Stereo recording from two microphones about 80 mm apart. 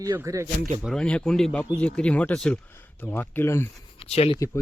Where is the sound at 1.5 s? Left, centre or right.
Left.